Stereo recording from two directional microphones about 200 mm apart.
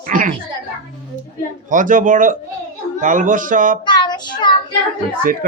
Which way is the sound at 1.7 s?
40° right (ahead or behind).